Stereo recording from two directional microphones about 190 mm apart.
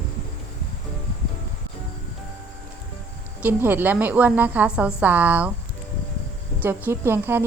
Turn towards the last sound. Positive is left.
turn(degrees=-10)  # may be behind; listen again after turning